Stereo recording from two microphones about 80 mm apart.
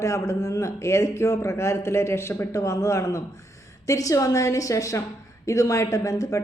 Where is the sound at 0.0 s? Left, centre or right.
Left.